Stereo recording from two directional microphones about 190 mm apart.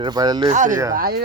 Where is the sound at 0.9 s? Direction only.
50° right (ahead or behind).